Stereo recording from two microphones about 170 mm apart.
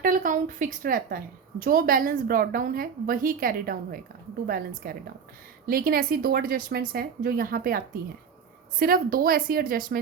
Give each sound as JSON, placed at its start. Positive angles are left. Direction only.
{"t": 0.0, "sound": "a woman's voice", "side_deg": -55}
{"t": 8.8, "sound": "a woman's voice", "side_deg": -60}